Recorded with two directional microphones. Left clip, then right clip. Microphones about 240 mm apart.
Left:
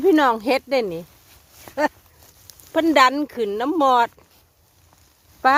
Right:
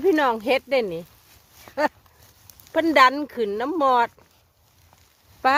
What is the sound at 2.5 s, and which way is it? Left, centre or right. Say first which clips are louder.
Speech: left 2 dB; centre.